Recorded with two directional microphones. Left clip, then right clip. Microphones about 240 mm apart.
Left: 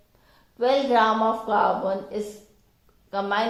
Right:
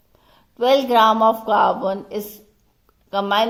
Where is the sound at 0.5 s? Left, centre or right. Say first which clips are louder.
Right 5 dB; right.